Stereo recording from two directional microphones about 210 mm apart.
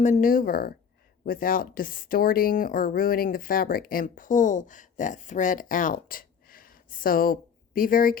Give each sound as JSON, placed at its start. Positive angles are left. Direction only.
{"t": 0.0, "sound": "speech", "side_deg": 40}